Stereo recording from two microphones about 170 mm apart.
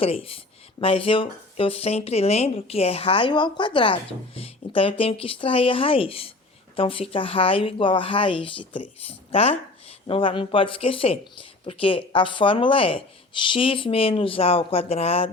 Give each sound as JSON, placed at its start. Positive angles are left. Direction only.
{"t": 0.0, "sound": "speech", "side_deg": 35}